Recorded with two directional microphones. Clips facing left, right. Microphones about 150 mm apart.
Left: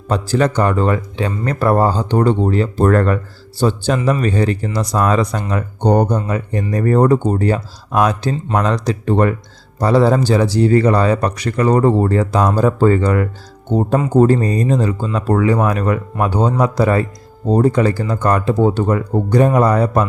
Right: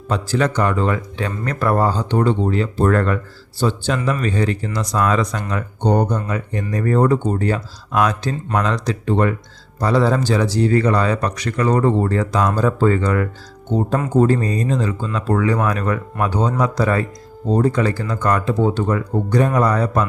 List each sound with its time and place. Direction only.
0.1 s speech: 35° left (ahead or behind)